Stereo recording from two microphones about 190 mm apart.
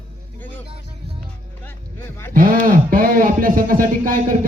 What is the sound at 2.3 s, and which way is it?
Speech, 45° right (ahead or behind).